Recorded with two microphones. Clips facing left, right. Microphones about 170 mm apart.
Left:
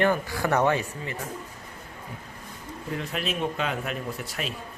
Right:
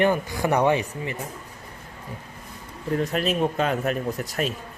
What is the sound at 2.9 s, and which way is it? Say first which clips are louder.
Speech: right 7 dB; 40° right (ahead or behind).